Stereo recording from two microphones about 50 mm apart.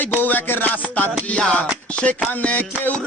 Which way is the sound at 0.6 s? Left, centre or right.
Left.